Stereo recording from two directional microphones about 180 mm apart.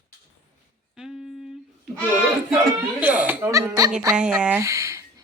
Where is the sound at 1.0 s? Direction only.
Centre (ahead or behind).